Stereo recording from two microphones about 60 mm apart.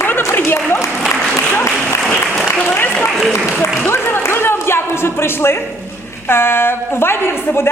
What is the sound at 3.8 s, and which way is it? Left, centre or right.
A man's voice, left.